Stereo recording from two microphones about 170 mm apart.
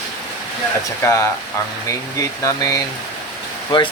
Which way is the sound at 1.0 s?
15° left (ahead or behind).